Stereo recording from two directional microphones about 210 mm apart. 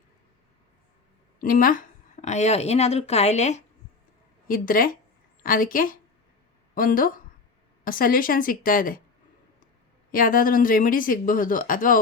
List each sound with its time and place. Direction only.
1.4 s speech: 40° left (ahead or behind)
4.4 s a woman's voice: 40° left (ahead or behind)
10.1 s speech: 40° left (ahead or behind)